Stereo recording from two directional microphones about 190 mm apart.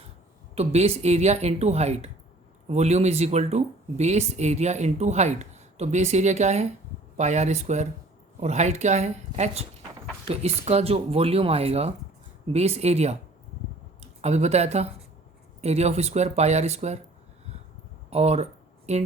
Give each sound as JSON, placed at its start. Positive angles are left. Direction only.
{"t": 0.5, "sound": "speech", "side_deg": -35}
{"t": 18.1, "sound": "speech", "side_deg": -35}